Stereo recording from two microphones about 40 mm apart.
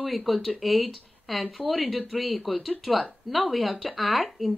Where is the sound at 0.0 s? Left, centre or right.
Centre.